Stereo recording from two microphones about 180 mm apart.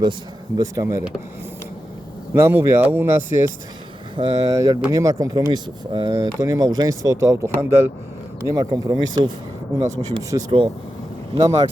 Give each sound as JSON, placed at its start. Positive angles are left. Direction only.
{"t": 0.0, "sound": "speech", "side_deg": -25}
{"t": 2.3, "sound": "speech", "side_deg": -10}
{"t": 4.2, "sound": "speech", "side_deg": -20}